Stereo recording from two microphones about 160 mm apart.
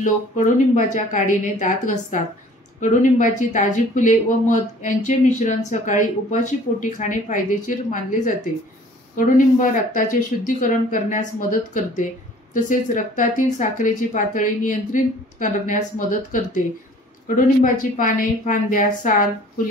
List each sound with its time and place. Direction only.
0.7 s speech: 50° left (ahead or behind)
17.7 s speech: 55° left (ahead or behind)